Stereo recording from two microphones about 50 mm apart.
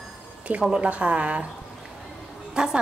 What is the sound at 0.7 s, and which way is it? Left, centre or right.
Speech, right.